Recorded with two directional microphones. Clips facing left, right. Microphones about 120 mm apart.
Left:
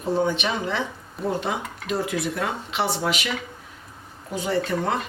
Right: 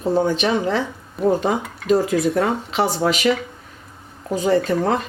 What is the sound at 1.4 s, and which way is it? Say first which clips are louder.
Speech: right 6 dB; 40° right (ahead or behind).